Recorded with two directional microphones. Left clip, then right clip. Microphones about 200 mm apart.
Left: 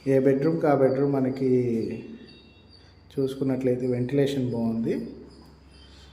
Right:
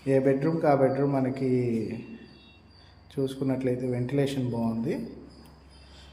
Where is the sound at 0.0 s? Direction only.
10° left (ahead or behind).